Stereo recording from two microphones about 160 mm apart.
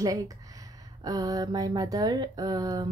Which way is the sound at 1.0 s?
25° right (ahead or behind).